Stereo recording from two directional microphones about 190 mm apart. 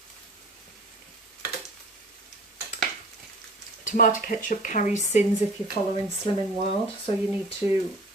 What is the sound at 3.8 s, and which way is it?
Speech, 45° left (ahead or behind).